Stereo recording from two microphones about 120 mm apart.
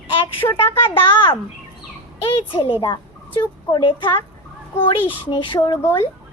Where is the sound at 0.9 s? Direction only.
50° left (ahead or behind).